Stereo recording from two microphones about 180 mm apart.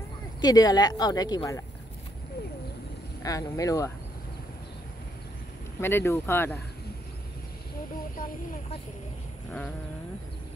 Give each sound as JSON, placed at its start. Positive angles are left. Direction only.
{"t": 0.4, "sound": "speech", "side_deg": 20}
{"t": 3.2, "sound": "speech", "side_deg": 20}
{"t": 5.8, "sound": "speech", "side_deg": 15}